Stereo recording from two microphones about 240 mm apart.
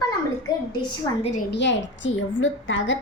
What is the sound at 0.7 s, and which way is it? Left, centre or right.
Speech, centre.